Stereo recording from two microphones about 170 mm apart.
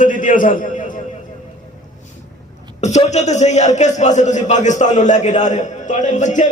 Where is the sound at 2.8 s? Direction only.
40° left (ahead or behind).